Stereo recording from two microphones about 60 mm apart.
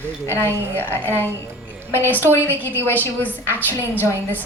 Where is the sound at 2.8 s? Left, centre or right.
Left.